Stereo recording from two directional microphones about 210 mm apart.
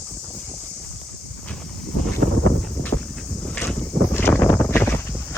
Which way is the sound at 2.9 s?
30° left (ahead or behind).